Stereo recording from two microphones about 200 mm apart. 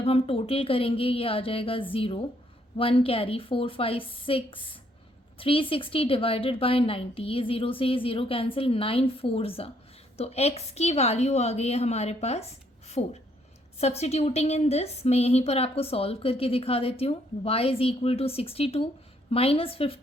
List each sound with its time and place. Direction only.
0.0 s a woman's voice: 30° left (ahead or behind)